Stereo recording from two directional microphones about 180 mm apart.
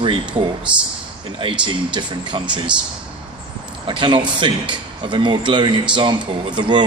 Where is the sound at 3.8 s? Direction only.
25° right (ahead or behind).